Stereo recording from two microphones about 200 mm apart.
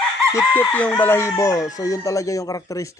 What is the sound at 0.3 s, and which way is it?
Speech, 10° left (ahead or behind).